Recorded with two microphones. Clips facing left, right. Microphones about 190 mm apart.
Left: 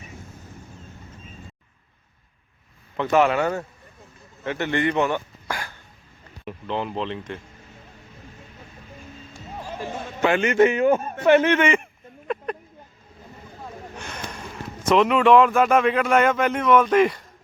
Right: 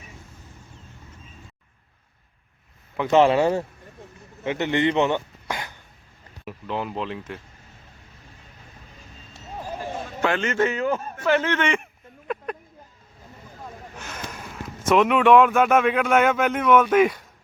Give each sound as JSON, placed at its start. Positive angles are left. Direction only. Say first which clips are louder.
{"t": 3.1, "sound": "speech", "louder": "right 3 dB", "side_deg": -30}
{"t": 6.4, "sound": "speech", "louder": "left 1 dB", "side_deg": -5}
{"t": 10.2, "sound": "speech", "louder": "left 5 dB", "side_deg": 15}
{"t": 11.6, "sound": "speech", "louder": "left 3 dB", "side_deg": 0}
{"t": 13.9, "sound": "speech", "louder": "even", "side_deg": -5}